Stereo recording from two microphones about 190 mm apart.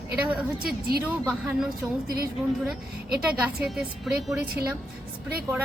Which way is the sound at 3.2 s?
5° right (ahead or behind).